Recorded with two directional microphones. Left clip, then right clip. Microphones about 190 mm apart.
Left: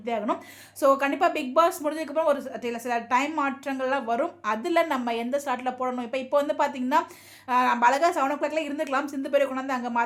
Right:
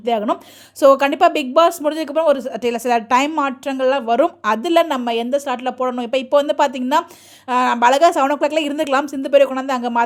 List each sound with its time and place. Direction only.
0.0 s a woman's voice: 45° right (ahead or behind)